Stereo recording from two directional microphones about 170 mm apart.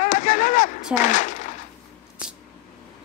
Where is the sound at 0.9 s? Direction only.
45° left (ahead or behind).